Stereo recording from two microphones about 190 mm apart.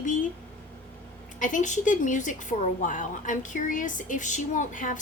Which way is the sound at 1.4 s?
40° left (ahead or behind).